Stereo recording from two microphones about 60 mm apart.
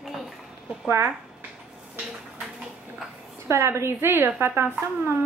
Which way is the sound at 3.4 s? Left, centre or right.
Right.